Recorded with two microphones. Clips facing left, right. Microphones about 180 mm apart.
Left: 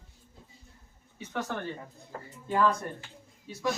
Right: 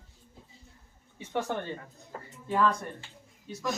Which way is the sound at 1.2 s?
30° right (ahead or behind).